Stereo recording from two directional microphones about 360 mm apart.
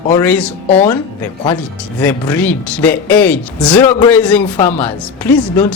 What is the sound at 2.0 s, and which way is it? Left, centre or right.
Speech, centre.